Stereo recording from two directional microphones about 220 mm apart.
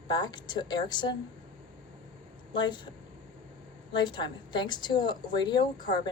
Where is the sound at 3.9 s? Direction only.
20° left (ahead or behind).